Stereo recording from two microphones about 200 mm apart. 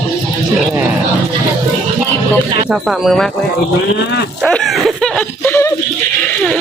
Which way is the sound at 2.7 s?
Centre (ahead or behind).